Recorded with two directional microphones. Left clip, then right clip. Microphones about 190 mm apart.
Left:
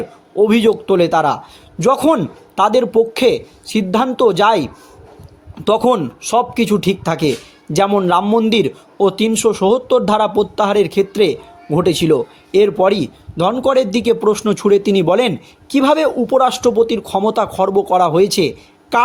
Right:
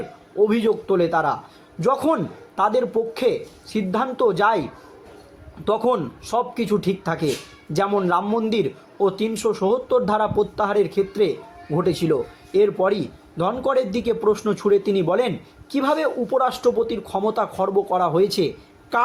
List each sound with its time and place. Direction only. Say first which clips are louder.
0.3 s a man's voice: left 6 dB; 50° left (ahead or behind)
5.6 s a man's voice: left 7 dB; 50° left (ahead or behind)